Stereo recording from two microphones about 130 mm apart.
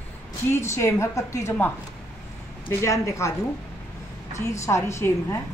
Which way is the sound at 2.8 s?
25° left (ahead or behind).